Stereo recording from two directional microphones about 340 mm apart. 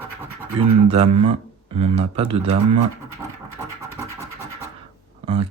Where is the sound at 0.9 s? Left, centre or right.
Centre.